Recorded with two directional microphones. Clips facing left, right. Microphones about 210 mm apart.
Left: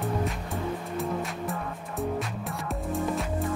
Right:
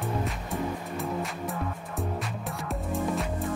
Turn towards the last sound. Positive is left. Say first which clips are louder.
# even
turn(degrees=0)  # may be behind; listen again after turning